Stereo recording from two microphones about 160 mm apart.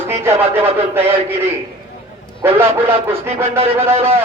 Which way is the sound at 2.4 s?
15° right (ahead or behind).